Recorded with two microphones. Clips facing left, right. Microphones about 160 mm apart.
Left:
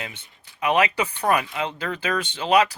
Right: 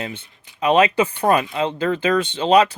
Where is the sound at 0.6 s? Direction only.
30° right (ahead or behind).